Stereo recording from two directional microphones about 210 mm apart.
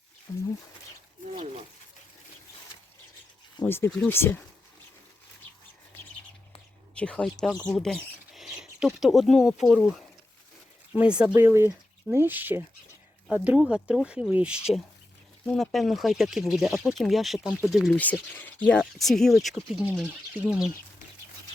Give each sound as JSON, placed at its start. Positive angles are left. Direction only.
{"t": 0.3, "sound": "speech", "side_deg": 15}
{"t": 3.6, "sound": "speech", "side_deg": 10}
{"t": 6.9, "sound": "speech", "side_deg": 5}